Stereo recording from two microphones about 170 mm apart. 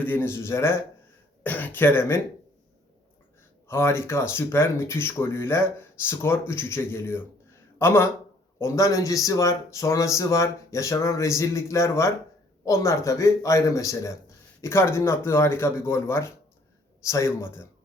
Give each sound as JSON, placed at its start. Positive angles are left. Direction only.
{"t": 0.0, "sound": "speech", "side_deg": 10}
{"t": 3.7, "sound": "speech", "side_deg": 15}